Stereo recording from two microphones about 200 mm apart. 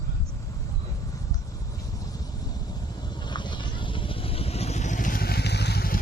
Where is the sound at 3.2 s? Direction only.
20° left (ahead or behind).